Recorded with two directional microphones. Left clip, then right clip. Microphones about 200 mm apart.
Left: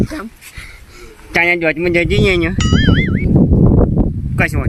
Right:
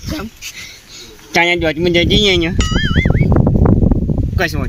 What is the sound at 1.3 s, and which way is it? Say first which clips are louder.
Speech: even; 5° left (ahead or behind).